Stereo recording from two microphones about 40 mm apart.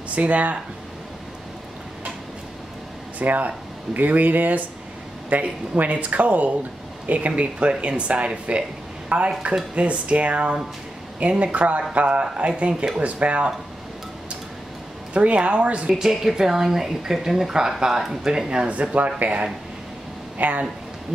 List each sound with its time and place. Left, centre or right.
0.1 s speech: right
3.2 s speech: right
9.1 s speech: right
13.0 s speech: right
15.1 s speech: right
15.9 s speech: centre
18.7 s speech: right